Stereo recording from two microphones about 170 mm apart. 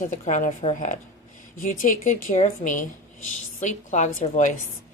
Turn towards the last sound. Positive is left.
turn(degrees=50)  # may be behind; listen again after turning